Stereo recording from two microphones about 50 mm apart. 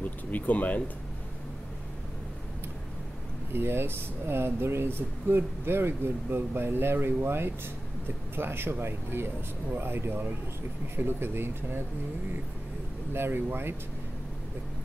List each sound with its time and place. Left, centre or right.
0.3 s speech: left
3.5 s speech: right
13.1 s speech: right